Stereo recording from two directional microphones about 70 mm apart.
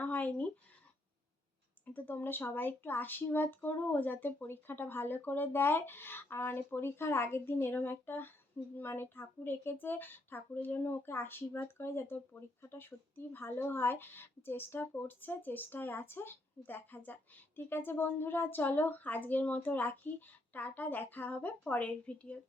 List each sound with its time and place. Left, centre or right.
0.0 s speech: left
1.8 s a woman's voice: left